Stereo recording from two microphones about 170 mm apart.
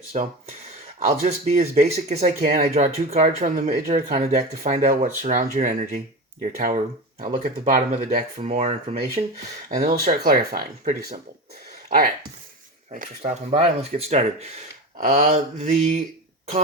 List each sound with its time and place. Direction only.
0.1 s speech: 40° right (ahead or behind)
8.4 s speech: 35° right (ahead or behind)
9.6 s speech: 50° right (ahead or behind)
12.9 s speech: 50° right (ahead or behind)
13.5 s speech: 35° right (ahead or behind)